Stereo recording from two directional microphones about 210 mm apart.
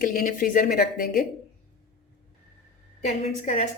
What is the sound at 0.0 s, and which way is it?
A woman's voice, 40° left (ahead or behind).